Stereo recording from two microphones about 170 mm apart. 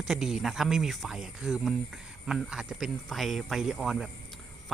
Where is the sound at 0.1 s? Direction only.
Centre (ahead or behind).